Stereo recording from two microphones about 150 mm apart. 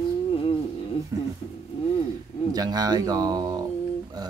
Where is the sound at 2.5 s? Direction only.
25° right (ahead or behind).